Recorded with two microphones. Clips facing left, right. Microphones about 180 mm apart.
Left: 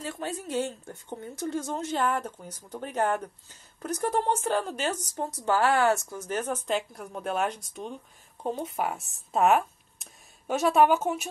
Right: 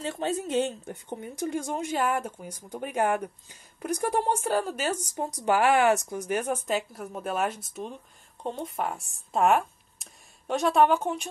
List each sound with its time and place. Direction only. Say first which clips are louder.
0.0 s speech: right 5 dB; 25° right (ahead or behind); by 11.2 s 5° left (ahead or behind)